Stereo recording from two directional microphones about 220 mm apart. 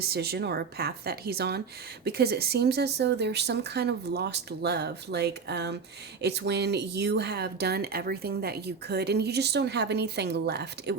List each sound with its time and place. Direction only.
0.0 s speech: 45° right (ahead or behind)